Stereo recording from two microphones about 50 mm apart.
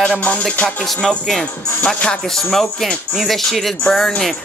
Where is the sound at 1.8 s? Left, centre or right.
Left.